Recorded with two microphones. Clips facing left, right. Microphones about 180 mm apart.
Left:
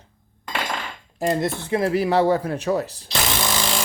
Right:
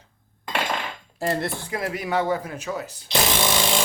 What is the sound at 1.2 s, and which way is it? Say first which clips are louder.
Speech: left 3 dB; 15° left (ahead or behind).